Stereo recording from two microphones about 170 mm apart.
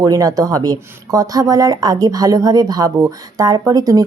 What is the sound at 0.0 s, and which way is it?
Speech, 20° right (ahead or behind).